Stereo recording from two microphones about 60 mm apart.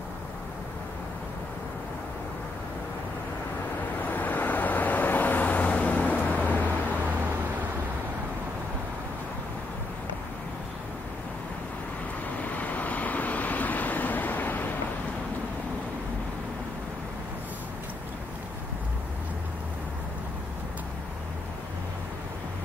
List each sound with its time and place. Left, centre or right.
4.0 s vehicle: left
12.4 s vehicle: left